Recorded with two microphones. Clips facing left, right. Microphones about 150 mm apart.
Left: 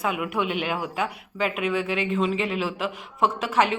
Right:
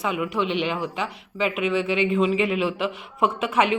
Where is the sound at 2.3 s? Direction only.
35° left (ahead or behind).